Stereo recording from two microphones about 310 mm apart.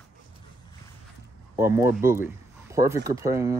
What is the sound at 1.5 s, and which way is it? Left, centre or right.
Speech, centre.